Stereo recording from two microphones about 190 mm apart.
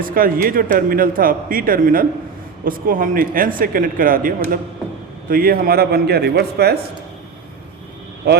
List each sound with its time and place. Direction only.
0.0 s a man's voice: 50° right (ahead or behind)
8.2 s a man's voice: 60° right (ahead or behind)